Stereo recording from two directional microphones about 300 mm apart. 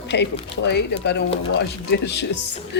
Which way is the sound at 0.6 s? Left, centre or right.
Left.